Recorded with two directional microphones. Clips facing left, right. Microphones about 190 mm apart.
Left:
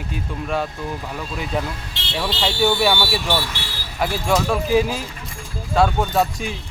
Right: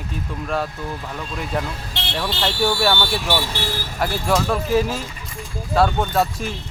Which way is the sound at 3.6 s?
45° right (ahead or behind).